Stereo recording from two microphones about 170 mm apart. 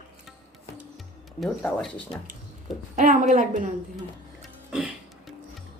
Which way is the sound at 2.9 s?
50° right (ahead or behind).